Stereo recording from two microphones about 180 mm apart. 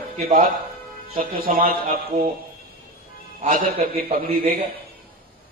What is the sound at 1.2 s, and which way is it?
A man's voice, 55° right (ahead or behind).